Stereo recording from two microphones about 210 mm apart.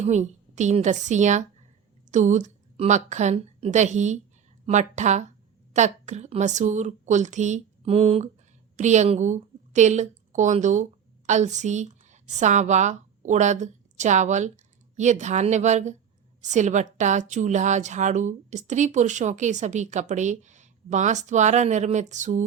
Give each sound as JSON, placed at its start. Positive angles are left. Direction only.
{"t": 0.0, "sound": "a woman's voice", "side_deg": -35}